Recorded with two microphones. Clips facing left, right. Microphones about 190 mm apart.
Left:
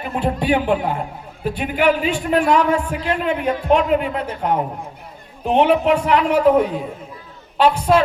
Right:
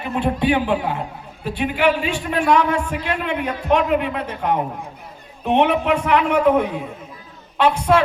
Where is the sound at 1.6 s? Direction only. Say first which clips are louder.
Left 1 dB; 45° left (ahead or behind).